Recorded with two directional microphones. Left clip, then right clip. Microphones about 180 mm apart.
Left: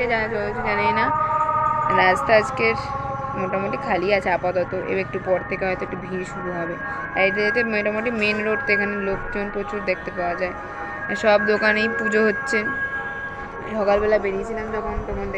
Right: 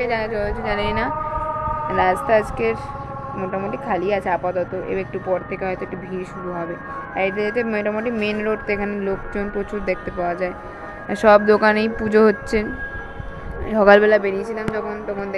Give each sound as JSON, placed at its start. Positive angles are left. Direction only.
{"t": 0.0, "sound": "speech", "side_deg": -5}
{"t": 14.0, "sound": "speech", "side_deg": -35}